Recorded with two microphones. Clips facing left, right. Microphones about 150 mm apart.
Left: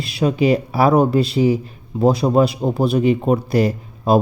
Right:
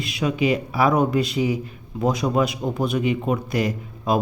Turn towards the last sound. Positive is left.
turn(degrees=35)  # may be behind; listen again after turning